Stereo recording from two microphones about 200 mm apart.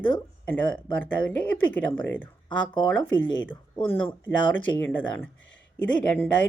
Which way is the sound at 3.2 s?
75° left (ahead or behind).